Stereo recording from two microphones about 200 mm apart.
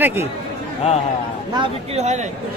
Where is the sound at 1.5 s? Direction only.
30° right (ahead or behind).